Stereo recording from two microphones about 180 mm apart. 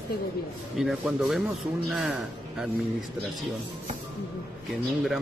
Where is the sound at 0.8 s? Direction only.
Centre (ahead or behind).